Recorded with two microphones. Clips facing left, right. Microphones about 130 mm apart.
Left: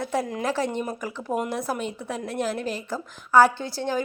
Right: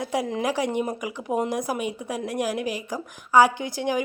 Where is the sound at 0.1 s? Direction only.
20° right (ahead or behind).